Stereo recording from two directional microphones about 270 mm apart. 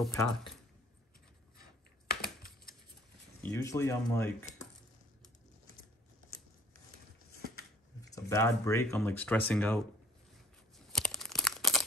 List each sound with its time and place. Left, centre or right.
0.0 s speech: centre
3.4 s speech: centre
7.3 s a sound: left
8.0 s speech: centre
10.9 s crunch: centre